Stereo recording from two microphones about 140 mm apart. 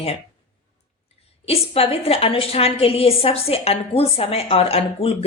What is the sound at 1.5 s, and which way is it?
Speech, 45° left (ahead or behind).